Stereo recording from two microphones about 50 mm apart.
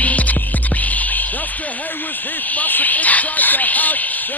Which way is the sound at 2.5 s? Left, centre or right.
Left.